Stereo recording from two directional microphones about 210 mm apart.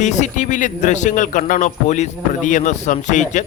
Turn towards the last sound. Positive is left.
turn(degrees=35)  # may be behind; listen again after turning